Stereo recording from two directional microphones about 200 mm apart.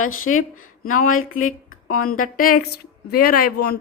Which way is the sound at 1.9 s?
45° left (ahead or behind).